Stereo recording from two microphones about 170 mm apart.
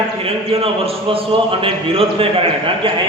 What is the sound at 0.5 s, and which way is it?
A man's voice, 35° right (ahead or behind).